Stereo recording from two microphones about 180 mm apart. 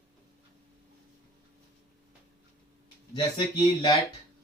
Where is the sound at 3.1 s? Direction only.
25° left (ahead or behind).